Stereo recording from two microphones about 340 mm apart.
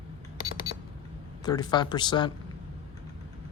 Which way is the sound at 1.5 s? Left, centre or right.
Centre.